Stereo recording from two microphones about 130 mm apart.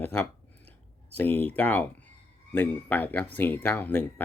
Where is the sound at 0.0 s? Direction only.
10° left (ahead or behind).